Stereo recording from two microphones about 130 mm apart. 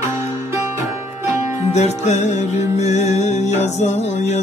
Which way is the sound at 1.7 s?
60° left (ahead or behind).